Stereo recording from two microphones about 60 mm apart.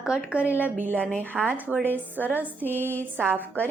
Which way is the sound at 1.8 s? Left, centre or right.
Left.